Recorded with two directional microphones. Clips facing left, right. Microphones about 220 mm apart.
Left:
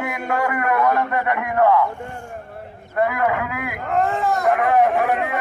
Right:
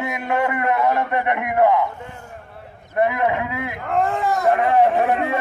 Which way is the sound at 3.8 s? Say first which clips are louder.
Even; centre (ahead or behind).